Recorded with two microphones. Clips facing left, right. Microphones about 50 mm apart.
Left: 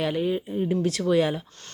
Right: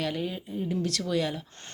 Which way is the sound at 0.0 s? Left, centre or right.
Centre.